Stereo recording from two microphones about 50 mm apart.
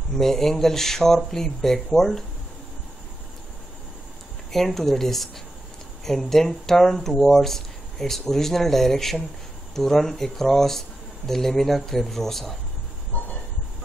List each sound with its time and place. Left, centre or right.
0.1 s speech: centre
4.5 s speech: centre
13.1 s train: left